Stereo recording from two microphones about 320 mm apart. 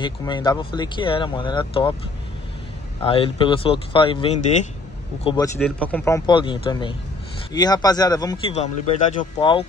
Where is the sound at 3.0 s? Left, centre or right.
Centre.